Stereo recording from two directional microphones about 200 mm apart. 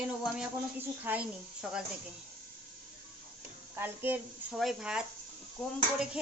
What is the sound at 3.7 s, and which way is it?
Speech, 10° right (ahead or behind).